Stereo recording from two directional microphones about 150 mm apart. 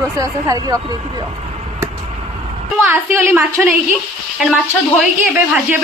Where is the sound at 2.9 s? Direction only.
15° right (ahead or behind).